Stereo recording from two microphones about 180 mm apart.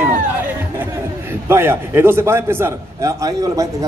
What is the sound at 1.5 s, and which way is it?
A man's voice, 15° right (ahead or behind).